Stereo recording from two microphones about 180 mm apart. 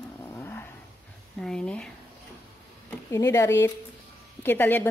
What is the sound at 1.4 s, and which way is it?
Speech, 5° left (ahead or behind).